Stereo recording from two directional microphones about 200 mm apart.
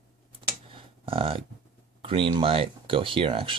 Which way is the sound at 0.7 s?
30° right (ahead or behind).